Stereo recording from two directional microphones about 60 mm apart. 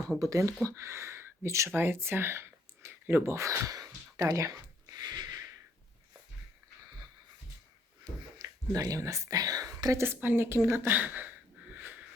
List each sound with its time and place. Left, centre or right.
0.2 s speech: right
3.3 s speech: right
8.4 s speech: right
10.0 s a woman's voice: right
10.8 s speech: right
11.7 s a sound: right